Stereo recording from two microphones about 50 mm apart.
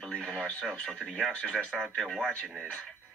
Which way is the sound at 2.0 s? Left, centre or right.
Centre.